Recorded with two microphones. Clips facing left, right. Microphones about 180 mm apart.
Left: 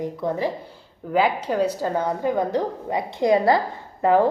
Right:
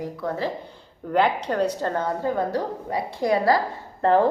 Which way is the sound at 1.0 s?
5° left (ahead or behind).